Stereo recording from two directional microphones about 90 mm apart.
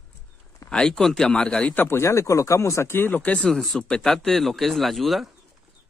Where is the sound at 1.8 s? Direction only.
30° left (ahead or behind).